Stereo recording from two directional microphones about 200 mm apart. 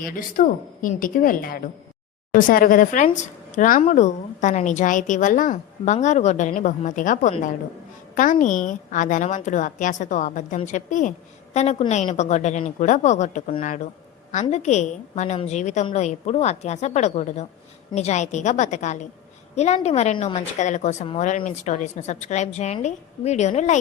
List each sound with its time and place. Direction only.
0.0 s a woman's voice: 45° left (ahead or behind)